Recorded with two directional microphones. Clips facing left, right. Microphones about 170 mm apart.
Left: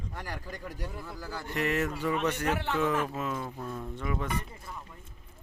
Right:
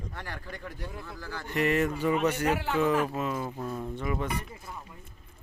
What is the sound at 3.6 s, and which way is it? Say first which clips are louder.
Speech: right 3 dB; 20° right (ahead or behind).